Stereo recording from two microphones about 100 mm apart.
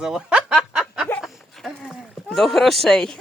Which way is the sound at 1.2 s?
Centre (ahead or behind).